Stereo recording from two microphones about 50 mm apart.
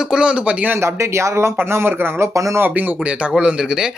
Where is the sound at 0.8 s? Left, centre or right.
Right.